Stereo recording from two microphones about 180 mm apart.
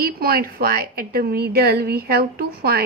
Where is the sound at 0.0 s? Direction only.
55° right (ahead or behind).